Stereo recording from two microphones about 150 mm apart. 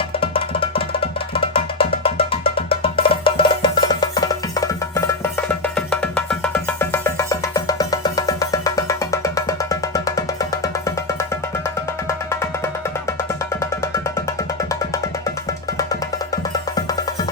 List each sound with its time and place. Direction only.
0.2 s music: 40° left (ahead or behind); by 12.5 s 20° left (ahead or behind)
13.6 s music: 20° left (ahead or behind)
15.8 s music: 25° left (ahead or behind)